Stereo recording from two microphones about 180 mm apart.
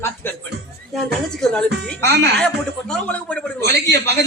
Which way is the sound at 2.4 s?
5° left (ahead or behind).